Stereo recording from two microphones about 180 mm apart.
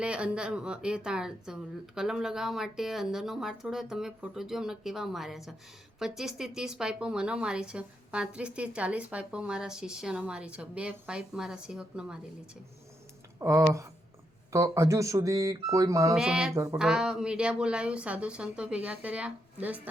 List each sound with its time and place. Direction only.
0.0 s a woman's voice: 5° right (ahead or behind)
13.4 s speech: 15° right (ahead or behind)
16.1 s a woman's voice: 5° right (ahead or behind)